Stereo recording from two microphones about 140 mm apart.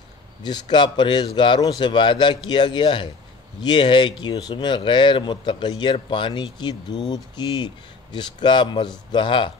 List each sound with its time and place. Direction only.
0.4 s speech: 30° left (ahead or behind)